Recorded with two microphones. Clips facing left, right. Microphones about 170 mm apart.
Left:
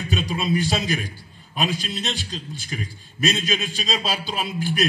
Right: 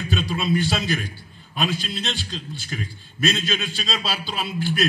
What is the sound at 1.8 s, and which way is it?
A man's voice, 40° left (ahead or behind).